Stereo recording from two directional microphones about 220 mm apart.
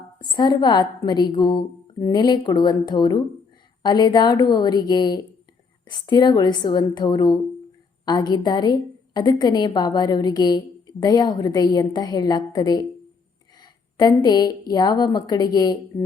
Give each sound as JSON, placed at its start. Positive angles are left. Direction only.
{"t": 0.2, "sound": "a woman's voice", "side_deg": 20}